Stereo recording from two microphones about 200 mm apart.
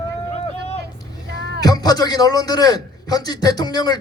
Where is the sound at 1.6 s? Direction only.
20° left (ahead or behind).